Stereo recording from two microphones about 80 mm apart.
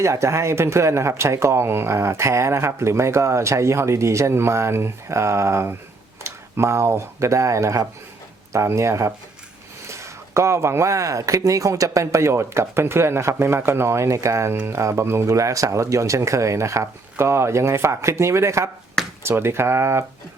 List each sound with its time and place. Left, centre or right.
0.0 s speech: right
19.0 s a sound: centre
19.4 s speech: right